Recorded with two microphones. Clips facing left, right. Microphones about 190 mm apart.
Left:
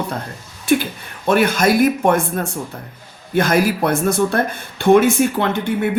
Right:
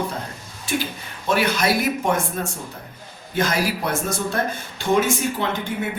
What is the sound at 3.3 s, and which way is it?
Speech, 55° left (ahead or behind).